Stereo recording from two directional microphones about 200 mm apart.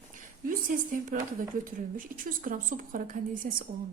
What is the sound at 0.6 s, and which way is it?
A woman's voice, 40° right (ahead or behind).